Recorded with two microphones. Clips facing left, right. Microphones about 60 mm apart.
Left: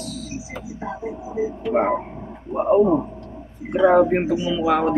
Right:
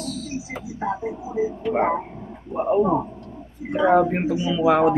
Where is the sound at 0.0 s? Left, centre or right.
Centre.